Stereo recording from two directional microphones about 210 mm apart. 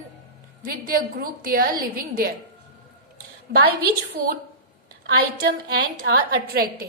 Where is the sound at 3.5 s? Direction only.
50° right (ahead or behind).